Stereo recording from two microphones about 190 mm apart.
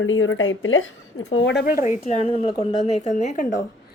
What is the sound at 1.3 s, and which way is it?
Speech, 75° left (ahead or behind).